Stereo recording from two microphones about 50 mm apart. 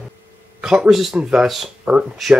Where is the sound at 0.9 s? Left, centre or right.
Centre.